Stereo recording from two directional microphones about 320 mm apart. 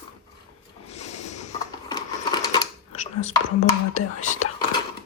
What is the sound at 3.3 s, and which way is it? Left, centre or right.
Speech, left.